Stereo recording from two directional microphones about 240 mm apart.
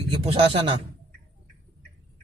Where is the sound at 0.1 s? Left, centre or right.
Right.